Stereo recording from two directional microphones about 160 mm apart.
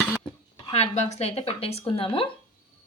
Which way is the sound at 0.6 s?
40° left (ahead or behind).